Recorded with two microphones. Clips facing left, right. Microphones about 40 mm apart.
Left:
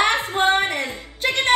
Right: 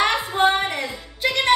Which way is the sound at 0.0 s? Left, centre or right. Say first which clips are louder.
Even; left.